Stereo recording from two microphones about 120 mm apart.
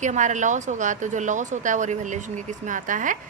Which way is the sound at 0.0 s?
90° right.